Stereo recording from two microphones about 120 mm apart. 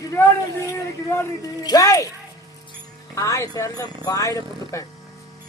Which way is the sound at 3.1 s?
25° left (ahead or behind).